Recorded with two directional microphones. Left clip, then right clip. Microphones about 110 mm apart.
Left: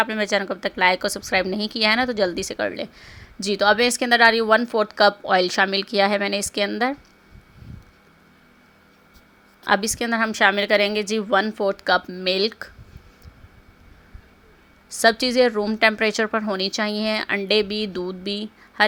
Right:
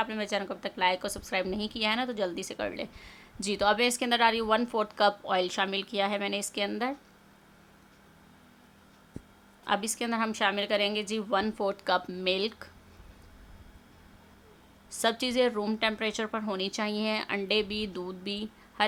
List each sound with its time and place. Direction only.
0.0 s a woman's voice: 45° left (ahead or behind)
9.8 s a woman's voice: 35° left (ahead or behind)
10.4 s a woman's voice: 45° left (ahead or behind)
11.5 s a woman's voice: 25° left (ahead or behind)
14.8 s a woman's voice: 30° left (ahead or behind)
15.8 s a woman's voice: 45° left (ahead or behind)
16.4 s a woman's voice: 30° left (ahead or behind)